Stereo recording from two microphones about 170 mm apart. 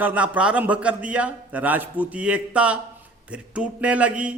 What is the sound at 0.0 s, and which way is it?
A man's voice, 10° right (ahead or behind).